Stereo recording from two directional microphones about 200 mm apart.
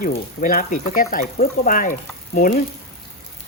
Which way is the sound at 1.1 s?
45° left (ahead or behind).